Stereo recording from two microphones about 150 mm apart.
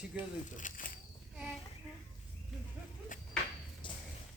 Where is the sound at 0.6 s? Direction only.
60° left (ahead or behind).